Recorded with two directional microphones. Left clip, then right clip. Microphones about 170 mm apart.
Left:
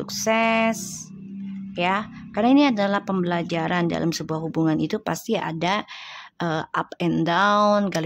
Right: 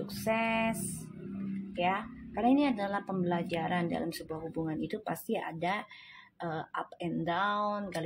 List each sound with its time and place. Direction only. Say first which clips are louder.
0.2 s speech: left 10 dB; 40° left (ahead or behind)
1.8 s speech: left 8 dB; 40° left (ahead or behind)